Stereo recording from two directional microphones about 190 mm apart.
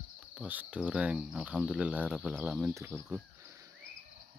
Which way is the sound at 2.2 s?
5° right (ahead or behind).